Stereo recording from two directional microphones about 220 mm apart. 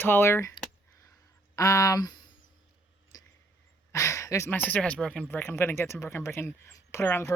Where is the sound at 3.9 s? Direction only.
15° left (ahead or behind).